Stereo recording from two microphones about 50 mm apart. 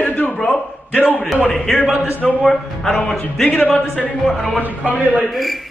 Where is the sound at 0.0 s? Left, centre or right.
Left.